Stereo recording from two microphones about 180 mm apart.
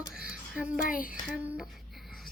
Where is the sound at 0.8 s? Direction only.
50° left (ahead or behind).